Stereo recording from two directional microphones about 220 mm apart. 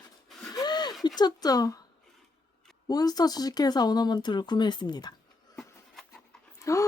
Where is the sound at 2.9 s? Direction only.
15° left (ahead or behind).